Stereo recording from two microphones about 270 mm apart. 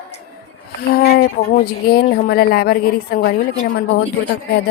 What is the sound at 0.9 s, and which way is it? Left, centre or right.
A woman's voice, left.